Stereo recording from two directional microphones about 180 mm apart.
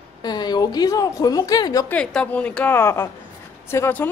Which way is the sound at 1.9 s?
5° left (ahead or behind).